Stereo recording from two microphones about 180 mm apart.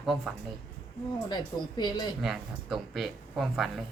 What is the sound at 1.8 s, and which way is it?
Speech, 25° left (ahead or behind).